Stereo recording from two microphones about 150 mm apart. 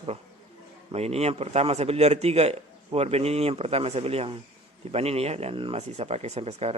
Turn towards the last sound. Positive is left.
turn(degrees=-45)  # may be behind; listen again after turning